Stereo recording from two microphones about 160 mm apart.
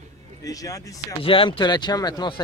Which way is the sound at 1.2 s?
35° left (ahead or behind).